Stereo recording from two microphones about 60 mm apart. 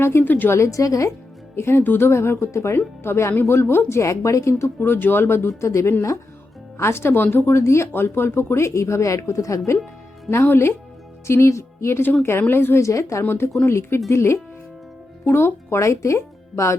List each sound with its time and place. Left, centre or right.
0.0 s speech: left
0.3 s speech: left
0.5 s a woman's voice: left
1.5 s speech: left
7.5 s speech: left
10.4 s speech: left
11.3 s speech: left
12.4 s speech: left
13.2 s speech: left